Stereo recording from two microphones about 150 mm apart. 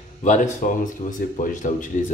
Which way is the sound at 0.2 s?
50° left (ahead or behind).